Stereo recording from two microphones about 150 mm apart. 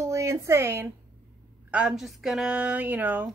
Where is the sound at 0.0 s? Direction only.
20° right (ahead or behind).